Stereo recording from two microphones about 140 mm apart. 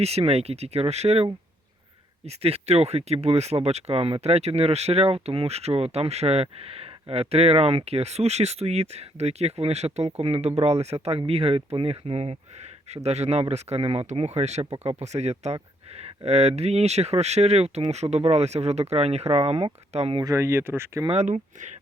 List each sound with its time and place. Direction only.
0.0 s speech: 45° right (ahead or behind)
20.1 s speech: 25° right (ahead or behind)
21.1 s speech: 50° right (ahead or behind)